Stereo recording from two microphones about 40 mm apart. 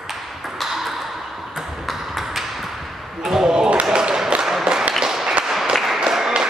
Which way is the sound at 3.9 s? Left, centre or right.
Right.